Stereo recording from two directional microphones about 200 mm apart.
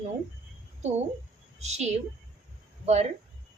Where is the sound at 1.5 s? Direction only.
35° right (ahead or behind).